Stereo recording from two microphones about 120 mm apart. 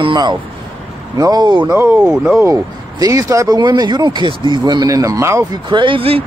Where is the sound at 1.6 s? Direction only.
15° right (ahead or behind).